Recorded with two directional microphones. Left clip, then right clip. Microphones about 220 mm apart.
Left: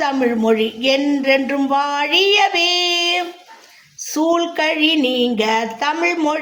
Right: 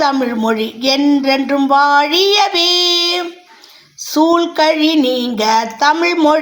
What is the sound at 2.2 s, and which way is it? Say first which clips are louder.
Speech: right 2 dB; 20° right (ahead or behind).